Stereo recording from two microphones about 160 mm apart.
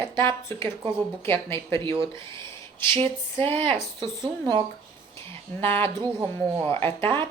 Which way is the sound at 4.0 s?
30° right (ahead or behind).